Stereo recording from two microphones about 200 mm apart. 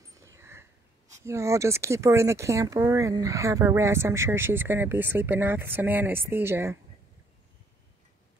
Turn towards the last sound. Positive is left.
turn(degrees=-10)  # may be behind; listen again after turning